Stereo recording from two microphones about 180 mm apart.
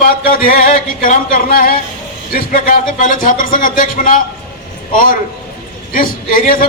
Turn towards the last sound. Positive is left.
turn(degrees=50)  # may be behind; listen again after turning